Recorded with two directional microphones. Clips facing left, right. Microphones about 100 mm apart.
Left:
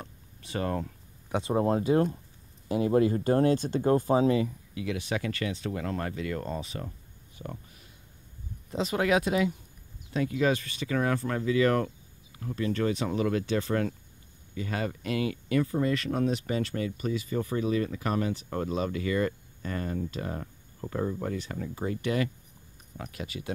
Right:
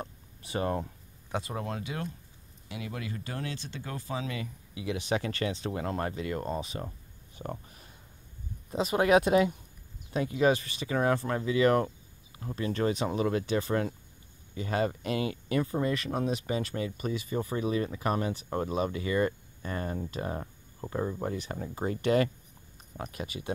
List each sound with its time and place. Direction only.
0.4 s speech: 15° right (ahead or behind)
1.4 s speech: 30° left (ahead or behind); by 4.3 s 45° left (ahead or behind)
4.7 s speech: 20° right (ahead or behind)
7.3 s a sound: 35° right (ahead or behind)
8.6 s a sound: 15° right (ahead or behind)
8.9 s speech: 30° right (ahead or behind)